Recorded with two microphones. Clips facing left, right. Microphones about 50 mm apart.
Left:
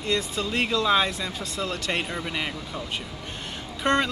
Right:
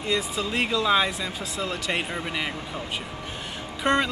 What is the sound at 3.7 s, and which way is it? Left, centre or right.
Speech, centre.